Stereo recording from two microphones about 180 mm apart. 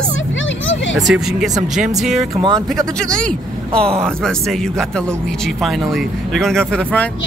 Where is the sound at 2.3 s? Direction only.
25° right (ahead or behind).